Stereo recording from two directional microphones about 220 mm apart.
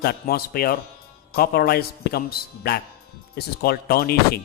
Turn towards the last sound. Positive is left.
turn(degrees=45)  # may be behind; listen again after turning